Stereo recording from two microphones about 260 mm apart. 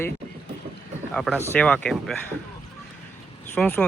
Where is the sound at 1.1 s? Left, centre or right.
Centre.